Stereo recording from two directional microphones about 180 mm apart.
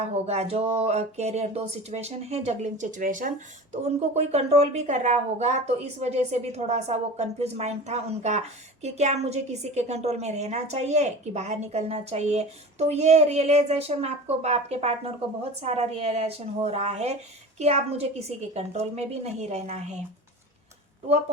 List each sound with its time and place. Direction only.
0.0 s speech: 35° right (ahead or behind)